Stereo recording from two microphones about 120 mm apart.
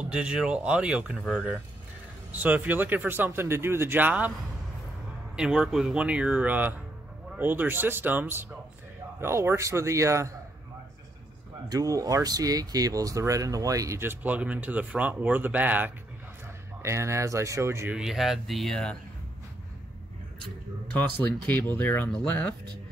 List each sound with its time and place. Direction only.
0.0 s speech: 10° right (ahead or behind)
5.3 s speech: 5° right (ahead or behind); by 10.3 s 25° right (ahead or behind)
11.7 s speech: 30° right (ahead or behind)
17.9 s speech: 5° right (ahead or behind)
20.9 s speech: 15° left (ahead or behind)